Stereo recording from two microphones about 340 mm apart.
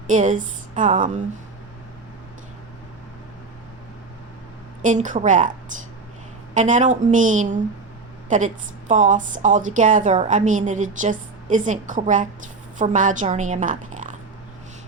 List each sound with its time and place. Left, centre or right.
0.1 s a woman's voice: right
4.8 s a woman's voice: right